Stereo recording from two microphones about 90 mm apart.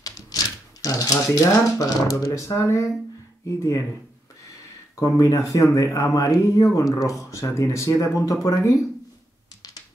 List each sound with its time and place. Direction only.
0.8 s speech: 40° left (ahead or behind)
4.9 s speech: 35° left (ahead or behind)